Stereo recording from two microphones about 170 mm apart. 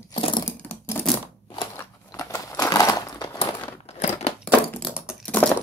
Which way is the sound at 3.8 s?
40° left (ahead or behind).